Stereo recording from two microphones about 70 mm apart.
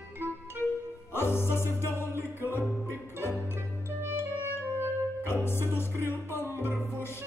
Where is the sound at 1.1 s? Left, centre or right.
Left.